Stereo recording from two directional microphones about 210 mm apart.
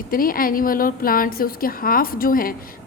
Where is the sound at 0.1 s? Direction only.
45° left (ahead or behind).